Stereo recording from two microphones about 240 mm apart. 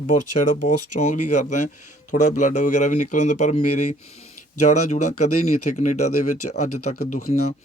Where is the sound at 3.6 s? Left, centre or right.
Left.